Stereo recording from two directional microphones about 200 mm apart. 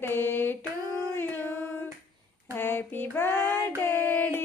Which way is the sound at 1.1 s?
10° left (ahead or behind).